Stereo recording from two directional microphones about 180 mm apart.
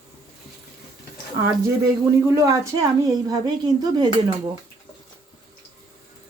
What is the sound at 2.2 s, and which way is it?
Speech, 15° right (ahead or behind).